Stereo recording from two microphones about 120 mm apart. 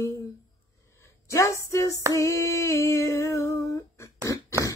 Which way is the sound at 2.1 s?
25° left (ahead or behind).